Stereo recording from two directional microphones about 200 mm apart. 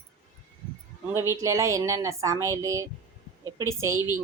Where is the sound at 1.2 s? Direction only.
15° right (ahead or behind).